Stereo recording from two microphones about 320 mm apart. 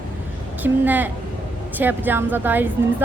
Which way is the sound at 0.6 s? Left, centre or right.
Centre.